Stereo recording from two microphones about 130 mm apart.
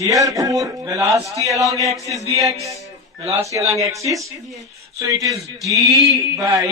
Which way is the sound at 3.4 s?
25° right (ahead or behind).